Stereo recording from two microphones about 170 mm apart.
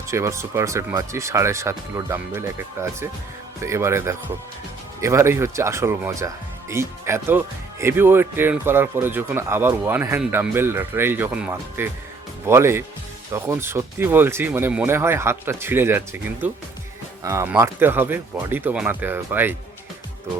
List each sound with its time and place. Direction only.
0.1 s speech: 15° right (ahead or behind)